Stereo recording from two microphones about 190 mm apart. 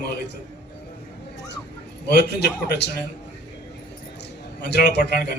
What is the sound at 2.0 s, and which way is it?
Speech, 60° left (ahead or behind).